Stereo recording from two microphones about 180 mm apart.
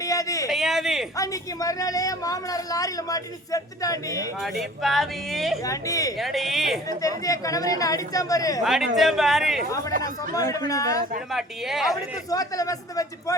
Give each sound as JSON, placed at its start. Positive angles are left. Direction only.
{"t": 0.0, "sound": "a sound", "side_deg": 20}
{"t": 0.5, "sound": "a sound", "side_deg": 0}
{"t": 1.1, "sound": "a woman's voice", "side_deg": 20}
{"t": 4.4, "sound": "speech", "side_deg": 0}
{"t": 5.6, "sound": "a woman's voice", "side_deg": 20}
{"t": 6.1, "sound": "speech", "side_deg": 0}
{"t": 7.0, "sound": "a woman's voice", "side_deg": 20}
{"t": 8.6, "sound": "speech", "side_deg": 0}
{"t": 10.0, "sound": "a woman's voice", "side_deg": 20}
{"t": 11.3, "sound": "speech", "side_deg": 0}
{"t": 12.3, "sound": "a woman's voice", "side_deg": 20}